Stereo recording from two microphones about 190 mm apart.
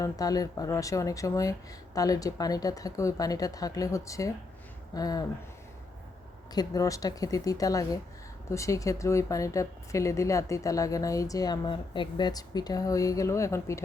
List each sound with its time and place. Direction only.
0.0 s a woman's voice: 20° left (ahead or behind)
6.5 s a woman's voice: 20° left (ahead or behind)